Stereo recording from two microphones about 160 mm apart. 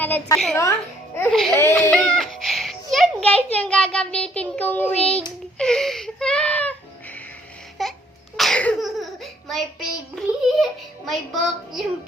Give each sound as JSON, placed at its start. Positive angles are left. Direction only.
{"t": 0.0, "sound": "a woman's voice", "side_deg": 10}
{"t": 1.3, "sound": "a child's voice", "side_deg": 0}
{"t": 5.5, "sound": "wail", "side_deg": 5}
{"t": 7.8, "sound": "a sound", "side_deg": 0}